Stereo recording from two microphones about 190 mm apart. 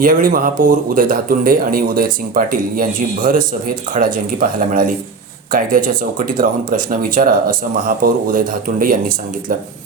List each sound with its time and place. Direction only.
0.0 s speech: 45° right (ahead or behind)